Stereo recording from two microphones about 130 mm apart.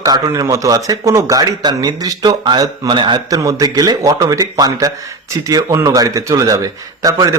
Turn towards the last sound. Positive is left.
turn(degrees=-25)  # may be behind; listen again after turning